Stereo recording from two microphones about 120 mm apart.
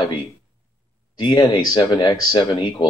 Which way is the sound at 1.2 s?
45° left (ahead or behind).